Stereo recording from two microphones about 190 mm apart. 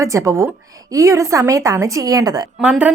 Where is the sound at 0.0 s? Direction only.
15° right (ahead or behind).